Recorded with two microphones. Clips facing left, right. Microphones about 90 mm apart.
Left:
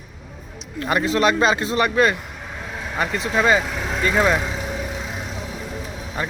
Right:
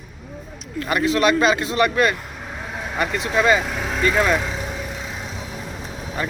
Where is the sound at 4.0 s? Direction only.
15° left (ahead or behind).